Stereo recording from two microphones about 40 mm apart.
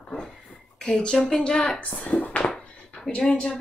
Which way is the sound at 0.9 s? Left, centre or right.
Centre.